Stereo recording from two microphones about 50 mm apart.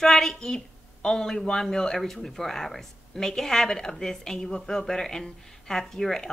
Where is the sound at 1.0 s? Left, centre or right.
Centre.